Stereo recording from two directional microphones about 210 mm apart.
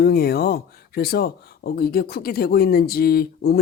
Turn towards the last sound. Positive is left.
turn(degrees=45)  # may be behind; listen again after turning